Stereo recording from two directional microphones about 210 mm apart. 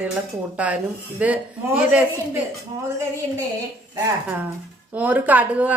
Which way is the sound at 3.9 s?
10° right (ahead or behind).